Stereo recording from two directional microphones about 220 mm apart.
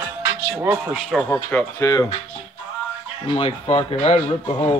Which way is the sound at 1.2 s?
10° left (ahead or behind).